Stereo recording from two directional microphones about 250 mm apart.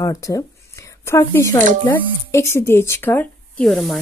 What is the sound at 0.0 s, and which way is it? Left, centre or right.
Speech, centre.